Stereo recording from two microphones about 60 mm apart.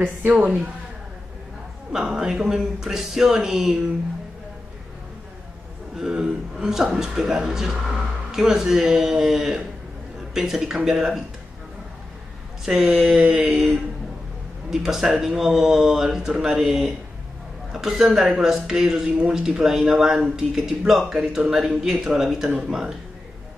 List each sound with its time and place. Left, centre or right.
0.3 s a man's voice: centre
1.9 s speech: centre
5.9 s a man's voice: centre
12.6 s speech: centre